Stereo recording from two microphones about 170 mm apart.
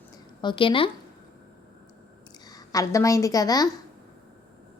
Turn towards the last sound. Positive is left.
turn(degrees=20)  # may be behind; listen again after turning